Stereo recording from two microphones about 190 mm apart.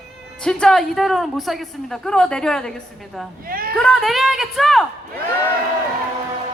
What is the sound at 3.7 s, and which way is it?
A woman's voice, centre (ahead or behind).